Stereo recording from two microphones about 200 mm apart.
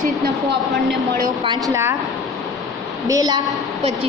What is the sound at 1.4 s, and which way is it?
Speech, 20° right (ahead or behind).